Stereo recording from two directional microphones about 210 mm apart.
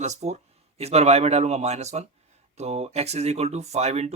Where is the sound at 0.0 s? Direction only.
35° right (ahead or behind).